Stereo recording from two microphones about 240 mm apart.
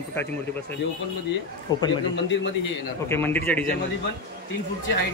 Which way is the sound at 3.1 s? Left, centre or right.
Centre.